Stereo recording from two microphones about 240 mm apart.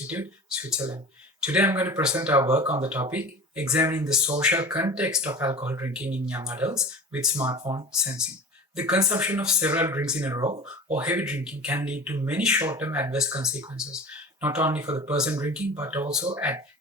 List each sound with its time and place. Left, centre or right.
0.1 s speech: centre
7.6 s speech: centre
8.2 s a man's voice: centre